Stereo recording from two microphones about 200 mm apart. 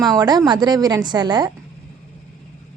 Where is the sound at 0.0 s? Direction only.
20° right (ahead or behind).